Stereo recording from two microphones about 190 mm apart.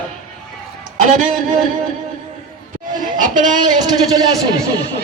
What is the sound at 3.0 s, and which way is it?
Speech, 45° right (ahead or behind).